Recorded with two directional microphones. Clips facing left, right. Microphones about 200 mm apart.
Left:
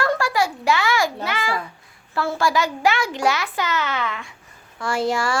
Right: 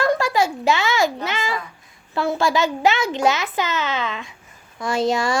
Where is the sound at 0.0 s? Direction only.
20° right (ahead or behind).